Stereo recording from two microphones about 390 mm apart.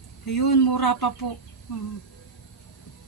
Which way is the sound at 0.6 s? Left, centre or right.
Left.